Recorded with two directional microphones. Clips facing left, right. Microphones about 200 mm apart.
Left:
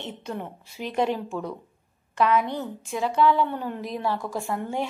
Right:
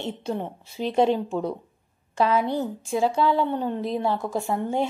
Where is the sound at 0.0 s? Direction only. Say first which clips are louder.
Right 5 dB; 30° right (ahead or behind).